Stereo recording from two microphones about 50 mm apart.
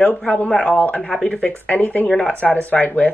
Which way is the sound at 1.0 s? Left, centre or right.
Centre.